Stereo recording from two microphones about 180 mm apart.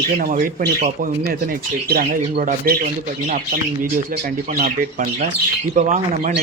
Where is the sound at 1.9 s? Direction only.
55° right (ahead or behind).